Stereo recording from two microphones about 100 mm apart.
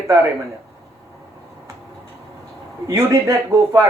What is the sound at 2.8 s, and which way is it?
Speech, 35° right (ahead or behind).